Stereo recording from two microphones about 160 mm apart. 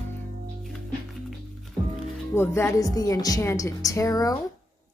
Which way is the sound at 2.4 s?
15° left (ahead or behind).